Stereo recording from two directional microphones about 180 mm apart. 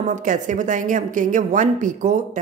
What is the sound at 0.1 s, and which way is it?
Speech, 45° right (ahead or behind).